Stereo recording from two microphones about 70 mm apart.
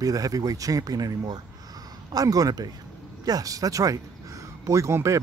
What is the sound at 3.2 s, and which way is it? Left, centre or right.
Speech, right.